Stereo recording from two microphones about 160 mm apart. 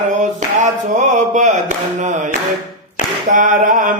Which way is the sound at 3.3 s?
55° right (ahead or behind).